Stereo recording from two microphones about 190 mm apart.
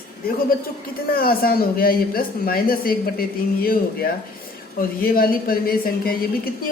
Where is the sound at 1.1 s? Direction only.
50° left (ahead or behind).